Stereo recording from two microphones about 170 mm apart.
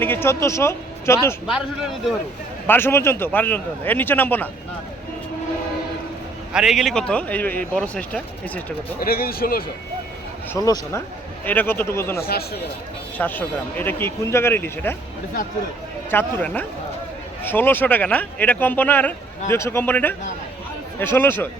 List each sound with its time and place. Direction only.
0.0 s speech: 10° left (ahead or behind)
1.5 s speech: 5° right (ahead or behind)
2.6 s speech: 15° left (ahead or behind)
6.5 s speech: 5° right (ahead or behind)
9.0 s speech: 60° left (ahead or behind)
10.5 s speech: 15° left (ahead or behind)
12.2 s speech: 65° left (ahead or behind)
13.1 s speech: 10° left (ahead or behind)
16.0 s speech: 10° left (ahead or behind)